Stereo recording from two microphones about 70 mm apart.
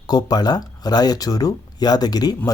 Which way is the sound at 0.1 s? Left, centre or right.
Left.